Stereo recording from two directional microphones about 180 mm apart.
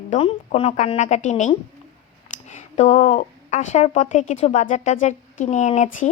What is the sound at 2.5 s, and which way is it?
Speech, 40° left (ahead or behind).